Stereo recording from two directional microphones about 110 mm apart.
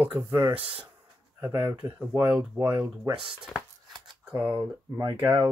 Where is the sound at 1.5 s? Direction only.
25° right (ahead or behind).